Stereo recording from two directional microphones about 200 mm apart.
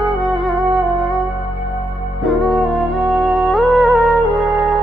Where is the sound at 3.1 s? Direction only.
Centre (ahead or behind).